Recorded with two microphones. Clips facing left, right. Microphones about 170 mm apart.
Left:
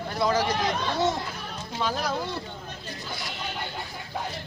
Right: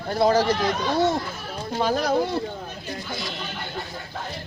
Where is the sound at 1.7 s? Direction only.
45° right (ahead or behind).